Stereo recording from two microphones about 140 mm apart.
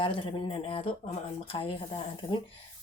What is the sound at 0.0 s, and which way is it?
Speech, 40° left (ahead or behind).